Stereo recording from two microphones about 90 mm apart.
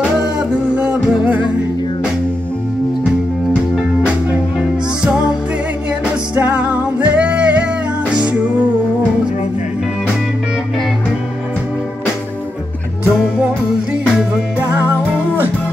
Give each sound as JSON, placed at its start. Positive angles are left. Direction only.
{"t": 0.4, "sound": "music", "side_deg": -15}
{"t": 6.3, "sound": "music", "side_deg": -20}